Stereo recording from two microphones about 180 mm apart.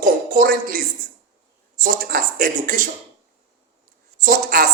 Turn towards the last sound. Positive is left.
turn(degrees=-50)  # may be behind; listen again after turning